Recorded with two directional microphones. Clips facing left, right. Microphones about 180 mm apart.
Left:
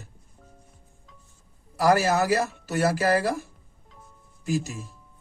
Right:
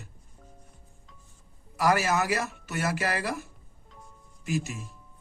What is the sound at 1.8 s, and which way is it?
Speech, 35° left (ahead or behind).